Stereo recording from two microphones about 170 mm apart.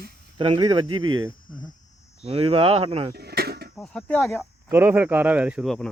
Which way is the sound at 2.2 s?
30° right (ahead or behind).